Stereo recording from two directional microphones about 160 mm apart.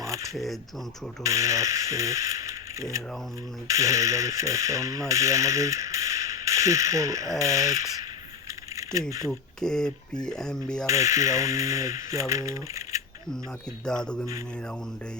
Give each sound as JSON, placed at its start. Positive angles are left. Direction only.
{"t": 1.2, "sound": "speech", "side_deg": -20}
{"t": 8.7, "sound": "camera", "side_deg": -20}
{"t": 9.3, "sound": "speech", "side_deg": 5}
{"t": 10.8, "sound": "speech", "side_deg": -20}
{"t": 13.8, "sound": "speech", "side_deg": 5}